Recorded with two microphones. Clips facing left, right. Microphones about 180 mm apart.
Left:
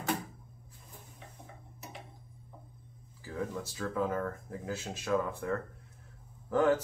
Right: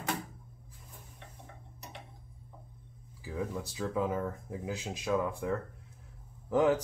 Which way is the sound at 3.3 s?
10° right (ahead or behind).